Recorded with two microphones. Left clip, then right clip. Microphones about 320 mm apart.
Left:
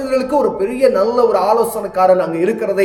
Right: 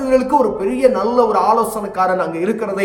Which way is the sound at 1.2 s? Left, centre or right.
Right.